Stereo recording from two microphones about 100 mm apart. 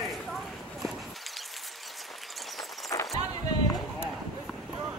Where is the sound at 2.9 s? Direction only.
30° left (ahead or behind).